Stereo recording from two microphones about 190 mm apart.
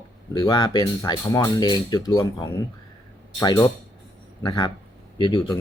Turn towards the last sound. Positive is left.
turn(degrees=25)  # may be behind; listen again after turning